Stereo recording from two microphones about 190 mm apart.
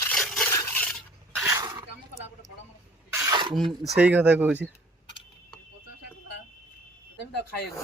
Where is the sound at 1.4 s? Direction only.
20° right (ahead or behind).